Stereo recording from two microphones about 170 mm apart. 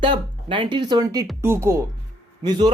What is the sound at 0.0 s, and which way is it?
A man's voice, 30° right (ahead or behind).